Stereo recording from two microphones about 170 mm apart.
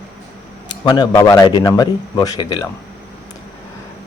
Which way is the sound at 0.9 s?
25° left (ahead or behind).